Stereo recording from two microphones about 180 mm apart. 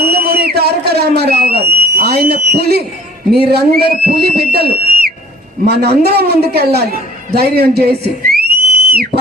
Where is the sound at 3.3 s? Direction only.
65° right (ahead or behind).